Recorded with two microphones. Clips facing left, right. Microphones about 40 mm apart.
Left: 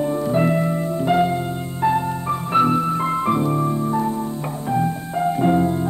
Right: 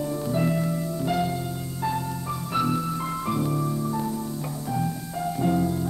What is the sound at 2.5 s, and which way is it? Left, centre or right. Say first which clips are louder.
Music: left 8 dB; left.